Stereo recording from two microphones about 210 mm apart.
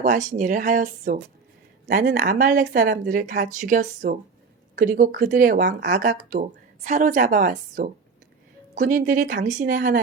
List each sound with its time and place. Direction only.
0.3 s speech: 40° right (ahead or behind)